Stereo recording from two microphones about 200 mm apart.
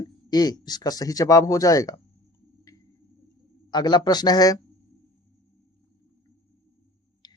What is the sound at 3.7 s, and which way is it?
Speech, 20° left (ahead or behind).